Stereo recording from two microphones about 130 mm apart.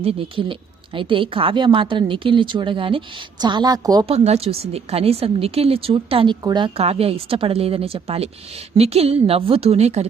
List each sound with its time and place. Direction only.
0.0 s a woman's voice: 45° right (ahead or behind); by 4.0 s 30° right (ahead or behind)
4.1 s a woman's voice: 55° right (ahead or behind)
6.4 s a woman's voice: 35° right (ahead or behind)
6.7 s a woman's voice: 50° right (ahead or behind)